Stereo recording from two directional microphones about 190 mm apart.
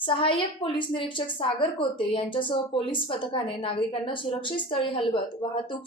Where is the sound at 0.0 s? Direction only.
25° left (ahead or behind).